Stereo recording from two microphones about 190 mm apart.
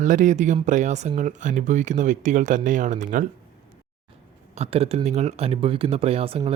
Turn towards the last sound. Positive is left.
turn(degrees=-30)  # may be behind; listen again after turning